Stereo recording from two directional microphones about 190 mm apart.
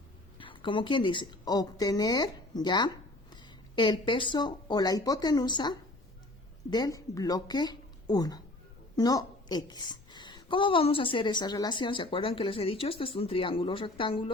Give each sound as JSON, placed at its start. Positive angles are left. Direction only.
{"t": 0.3, "sound": "a woman's voice", "side_deg": 25}